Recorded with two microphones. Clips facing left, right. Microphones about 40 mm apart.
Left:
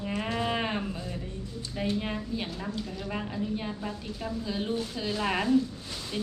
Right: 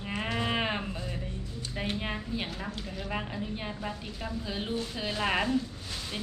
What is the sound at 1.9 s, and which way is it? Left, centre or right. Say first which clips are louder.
A man's voice: left 2 dB; centre.